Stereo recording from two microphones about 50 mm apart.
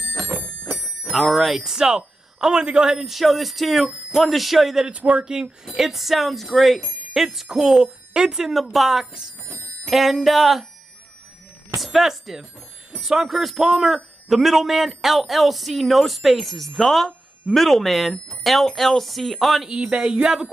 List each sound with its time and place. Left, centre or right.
0.0 s clock: left
0.3 s clock: right
0.7 s speech: centre
4.9 s speech: centre
5.7 s speech: centre
11.8 s speech: centre
19.7 s speech: centre